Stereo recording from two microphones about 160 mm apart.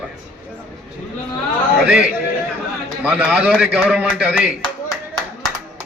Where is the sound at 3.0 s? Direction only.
5° right (ahead or behind).